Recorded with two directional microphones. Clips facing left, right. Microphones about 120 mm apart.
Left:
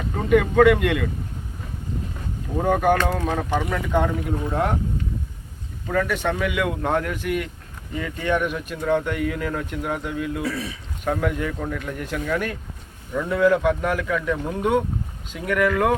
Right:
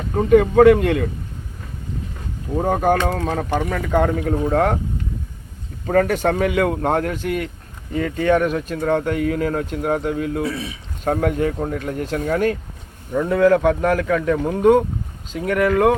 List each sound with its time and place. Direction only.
0.2 s speech: 30° right (ahead or behind)
2.6 s speech: 35° right (ahead or behind)
5.8 s speech: 50° right (ahead or behind); by 7.5 s 30° right (ahead or behind)
7.9 s speech: 45° right (ahead or behind)
10.4 s speech: 20° right (ahead or behind)
11.0 s speech: 40° right (ahead or behind)